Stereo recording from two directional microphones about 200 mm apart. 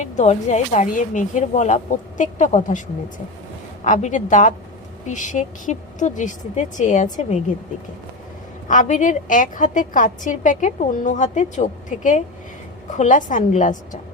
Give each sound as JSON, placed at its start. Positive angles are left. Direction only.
{"t": 0.0, "sound": "a woman's voice", "side_deg": 35}
{"t": 3.8, "sound": "a woman's voice", "side_deg": 40}
{"t": 8.6, "sound": "a woman's voice", "side_deg": 40}